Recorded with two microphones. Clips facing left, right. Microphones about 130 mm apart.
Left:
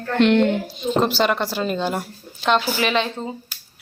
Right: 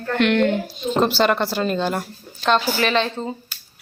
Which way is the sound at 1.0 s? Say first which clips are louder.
Right 1 dB; centre (ahead or behind).